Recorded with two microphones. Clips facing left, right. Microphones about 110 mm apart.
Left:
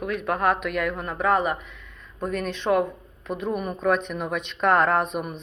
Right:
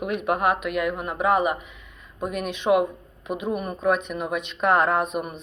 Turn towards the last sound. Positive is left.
turn(degrees=-5)  # may be behind; listen again after turning